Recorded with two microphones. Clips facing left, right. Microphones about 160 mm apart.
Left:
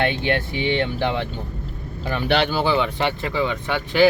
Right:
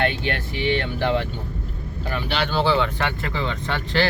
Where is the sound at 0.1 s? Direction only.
20° left (ahead or behind).